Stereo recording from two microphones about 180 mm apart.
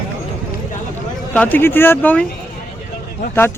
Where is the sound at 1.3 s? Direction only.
10° left (ahead or behind).